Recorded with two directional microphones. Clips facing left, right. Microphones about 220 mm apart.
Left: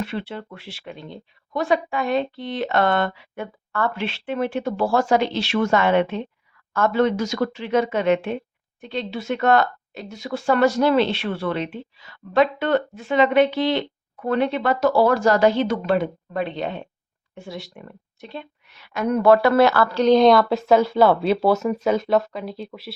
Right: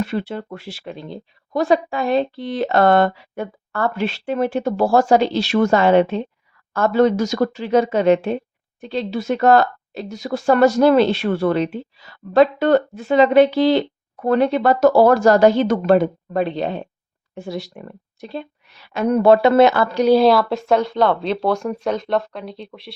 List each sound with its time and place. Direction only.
0.0 s a woman's voice: 45° right (ahead or behind); by 22.9 s 5° left (ahead or behind)